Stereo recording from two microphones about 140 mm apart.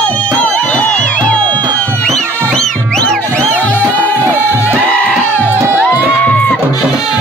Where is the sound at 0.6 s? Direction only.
10° left (ahead or behind).